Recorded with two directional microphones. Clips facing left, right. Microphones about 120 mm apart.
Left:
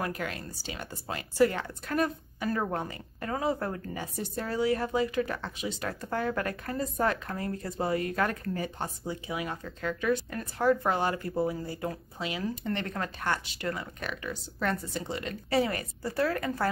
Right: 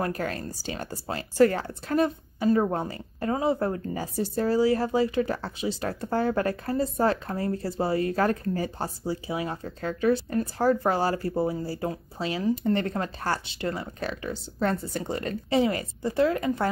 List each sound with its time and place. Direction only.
0.0 s a woman's voice: 40° right (ahead or behind)
14.9 s a woman's voice: 45° right (ahead or behind)
15.5 s a woman's voice: 25° right (ahead or behind)